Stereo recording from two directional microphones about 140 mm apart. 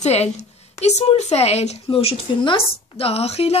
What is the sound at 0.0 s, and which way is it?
A woman's voice, 50° left (ahead or behind).